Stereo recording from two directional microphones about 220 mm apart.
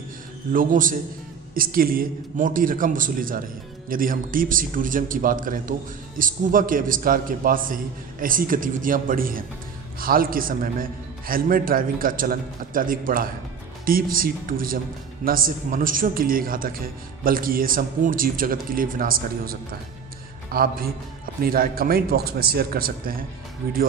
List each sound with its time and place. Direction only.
0.5 s a man's voice: 40° right (ahead or behind)